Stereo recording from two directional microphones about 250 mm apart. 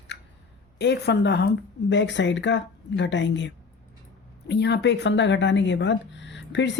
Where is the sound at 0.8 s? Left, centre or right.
Left.